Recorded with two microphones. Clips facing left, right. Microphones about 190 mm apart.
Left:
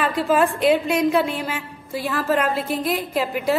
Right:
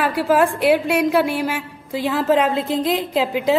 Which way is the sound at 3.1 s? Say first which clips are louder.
Right 3 dB; 90° right.